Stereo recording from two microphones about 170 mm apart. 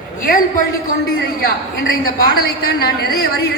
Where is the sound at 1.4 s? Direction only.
60° left (ahead or behind).